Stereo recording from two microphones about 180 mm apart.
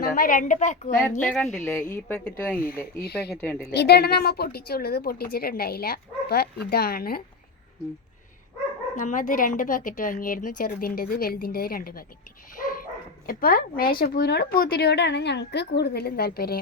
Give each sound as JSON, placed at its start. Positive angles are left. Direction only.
{"t": 0.0, "sound": "speech", "side_deg": 50}
{"t": 1.3, "sound": "a woman's voice", "side_deg": 5}
{"t": 3.0, "sound": "a woman's voice", "side_deg": 65}
{"t": 3.4, "sound": "a woman's voice", "side_deg": 10}
{"t": 3.7, "sound": "a woman's voice", "side_deg": 65}
{"t": 9.0, "sound": "speech", "side_deg": 45}
{"t": 13.2, "sound": "a woman's voice", "side_deg": 55}